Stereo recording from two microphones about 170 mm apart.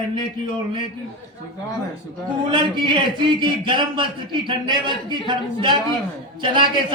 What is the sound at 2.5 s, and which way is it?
A man's voice, 25° right (ahead or behind).